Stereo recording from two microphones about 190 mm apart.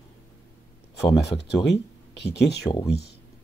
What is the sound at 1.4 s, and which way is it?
Speech, 60° left (ahead or behind).